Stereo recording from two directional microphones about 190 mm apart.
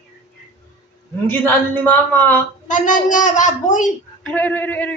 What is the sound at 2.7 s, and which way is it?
A child's voice, 40° left (ahead or behind).